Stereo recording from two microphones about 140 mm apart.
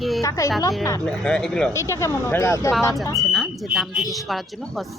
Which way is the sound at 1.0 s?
5° left (ahead or behind).